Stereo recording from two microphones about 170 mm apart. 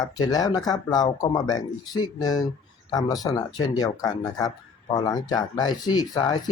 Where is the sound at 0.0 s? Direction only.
20° left (ahead or behind).